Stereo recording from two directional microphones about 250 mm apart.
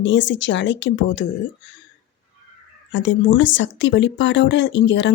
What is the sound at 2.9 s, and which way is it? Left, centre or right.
Speech, left.